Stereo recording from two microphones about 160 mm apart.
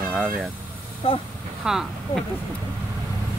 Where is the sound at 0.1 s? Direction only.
Centre (ahead or behind).